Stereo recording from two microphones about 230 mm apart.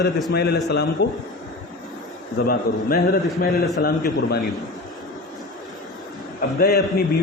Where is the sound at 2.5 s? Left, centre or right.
Left.